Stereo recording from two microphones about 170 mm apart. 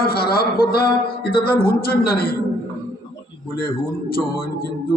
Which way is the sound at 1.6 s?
65° left (ahead or behind).